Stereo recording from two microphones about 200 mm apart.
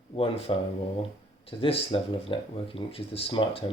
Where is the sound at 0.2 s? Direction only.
25° left (ahead or behind).